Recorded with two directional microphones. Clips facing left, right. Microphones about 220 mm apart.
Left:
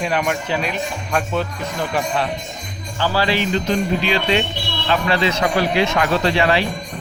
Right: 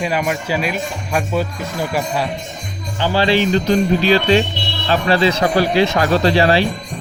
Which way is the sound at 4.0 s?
35° right (ahead or behind).